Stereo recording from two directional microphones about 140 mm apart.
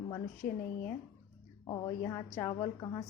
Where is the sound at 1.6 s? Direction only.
30° left (ahead or behind).